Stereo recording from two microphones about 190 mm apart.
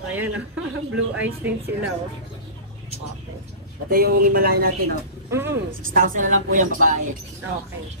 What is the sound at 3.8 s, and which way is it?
Speech, 50° right (ahead or behind).